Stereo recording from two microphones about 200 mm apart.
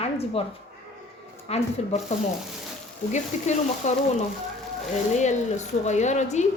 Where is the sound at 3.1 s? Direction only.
35° left (ahead or behind).